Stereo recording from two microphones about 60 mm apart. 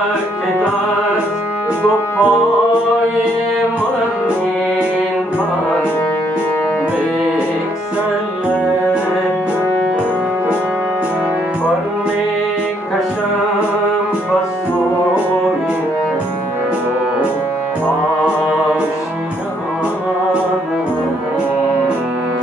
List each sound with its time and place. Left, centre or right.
1.8 s music: left